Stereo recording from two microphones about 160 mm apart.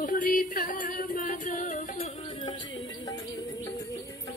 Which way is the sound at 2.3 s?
30° left (ahead or behind).